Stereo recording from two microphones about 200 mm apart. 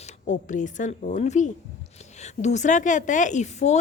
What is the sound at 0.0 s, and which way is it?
A woman's voice, 40° left (ahead or behind).